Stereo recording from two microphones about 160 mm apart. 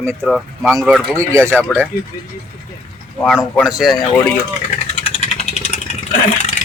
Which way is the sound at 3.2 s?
5° right (ahead or behind).